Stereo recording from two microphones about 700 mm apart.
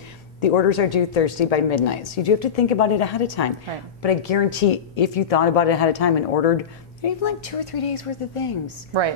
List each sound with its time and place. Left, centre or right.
0.4 s speech: left